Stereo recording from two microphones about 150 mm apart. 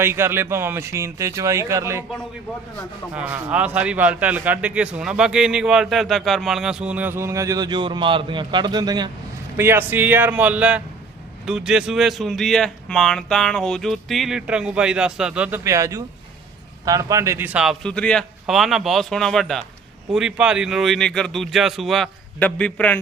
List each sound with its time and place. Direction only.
0.0 s a man's voice: 15° right (ahead or behind)
3.2 s a man's voice: 10° right (ahead or behind); by 9.0 s 30° right (ahead or behind)
9.6 s a man's voice: 15° right (ahead or behind)
17.8 s speech: 5° left (ahead or behind)